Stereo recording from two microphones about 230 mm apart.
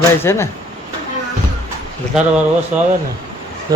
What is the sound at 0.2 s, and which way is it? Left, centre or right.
Speech, centre.